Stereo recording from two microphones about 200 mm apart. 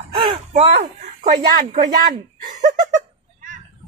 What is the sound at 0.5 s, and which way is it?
Speech, 30° right (ahead or behind).